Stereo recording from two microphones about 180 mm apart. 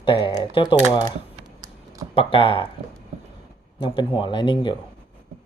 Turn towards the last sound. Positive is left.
turn(degrees=25)  # may be behind; listen again after turning